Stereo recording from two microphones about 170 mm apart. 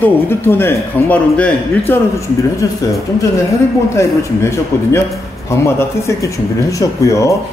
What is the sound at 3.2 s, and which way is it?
A man's voice, 15° left (ahead or behind).